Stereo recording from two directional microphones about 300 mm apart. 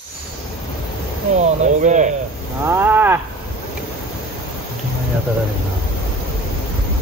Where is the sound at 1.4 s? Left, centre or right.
Right.